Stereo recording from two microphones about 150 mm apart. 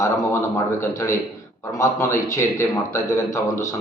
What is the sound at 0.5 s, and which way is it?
A man's voice, 20° left (ahead or behind).